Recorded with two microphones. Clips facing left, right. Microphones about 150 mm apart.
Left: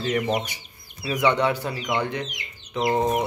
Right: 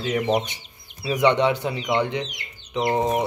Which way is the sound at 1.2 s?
20° right (ahead or behind).